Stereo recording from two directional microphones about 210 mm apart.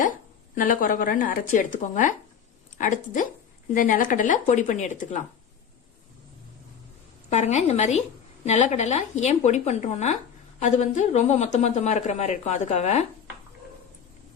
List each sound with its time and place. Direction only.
0.5 s a woman's voice: 40° left (ahead or behind)
7.3 s a woman's voice: 30° left (ahead or behind)